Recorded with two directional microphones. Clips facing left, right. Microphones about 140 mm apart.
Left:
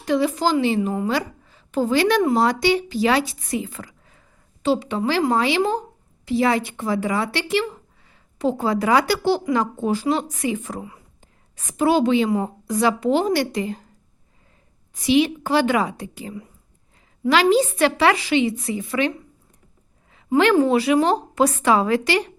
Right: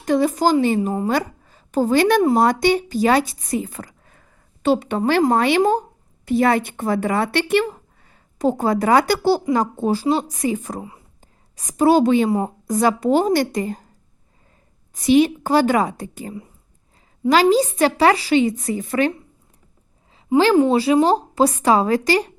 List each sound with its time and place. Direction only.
0.0 s a woman's voice: 45° right (ahead or behind)
0.8 s a woman's voice: 30° right (ahead or behind)
1.0 s a woman's voice: 45° right (ahead or behind)
15.0 s a woman's voice: 45° right (ahead or behind)
20.1 s a woman's voice: 30° right (ahead or behind)